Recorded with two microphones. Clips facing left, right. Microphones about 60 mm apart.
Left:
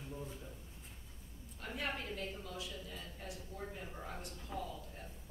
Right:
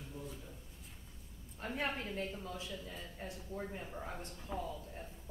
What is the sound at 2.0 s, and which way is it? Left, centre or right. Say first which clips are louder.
Speech: right 2 dB; right.